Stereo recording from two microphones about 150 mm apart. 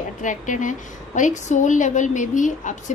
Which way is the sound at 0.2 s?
60° left (ahead or behind).